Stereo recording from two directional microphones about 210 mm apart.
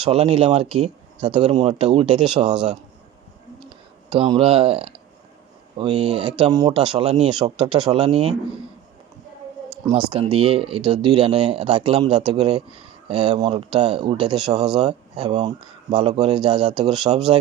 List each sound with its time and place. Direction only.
0.0 s speech: 25° right (ahead or behind)
2.5 s speech: 5° right (ahead or behind)
3.7 s speech: 25° right (ahead or behind)
6.5 s speech: 15° right (ahead or behind)
9.9 s speech: 15° right (ahead or behind)
10.3 s speech: 30° right (ahead or behind)
14.2 s speech: 5° right (ahead or behind)
14.8 s speech: 30° right (ahead or behind)